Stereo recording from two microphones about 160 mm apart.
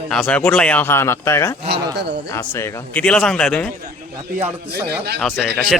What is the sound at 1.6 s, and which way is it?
Speech, 90° right.